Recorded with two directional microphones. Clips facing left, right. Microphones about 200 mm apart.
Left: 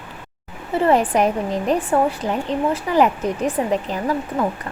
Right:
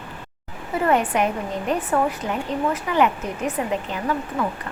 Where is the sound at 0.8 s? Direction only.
35° left (ahead or behind).